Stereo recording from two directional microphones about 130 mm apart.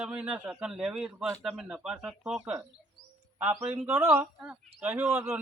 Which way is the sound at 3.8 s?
15° right (ahead or behind).